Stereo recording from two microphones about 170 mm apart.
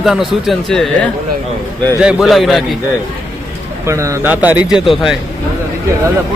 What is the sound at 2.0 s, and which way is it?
Speech, 5° right (ahead or behind).